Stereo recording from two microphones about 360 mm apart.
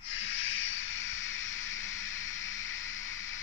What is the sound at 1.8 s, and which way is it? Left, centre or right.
Hiss, centre.